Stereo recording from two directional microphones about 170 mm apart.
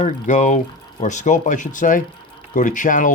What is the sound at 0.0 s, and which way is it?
Speech, 45° left (ahead or behind).